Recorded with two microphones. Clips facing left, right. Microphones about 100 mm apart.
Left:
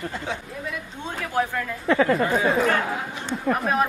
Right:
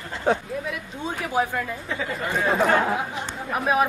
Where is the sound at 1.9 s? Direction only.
65° left (ahead or behind).